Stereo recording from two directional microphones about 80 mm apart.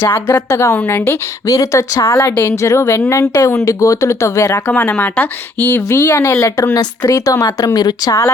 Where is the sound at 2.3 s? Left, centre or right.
Left.